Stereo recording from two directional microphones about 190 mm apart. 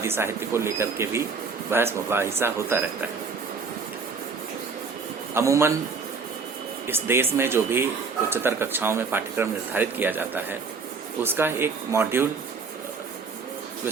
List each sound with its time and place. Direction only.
0.0 s speech: 15° right (ahead or behind)
5.3 s speech: 15° right (ahead or behind)
6.8 s speech: 10° right (ahead or behind)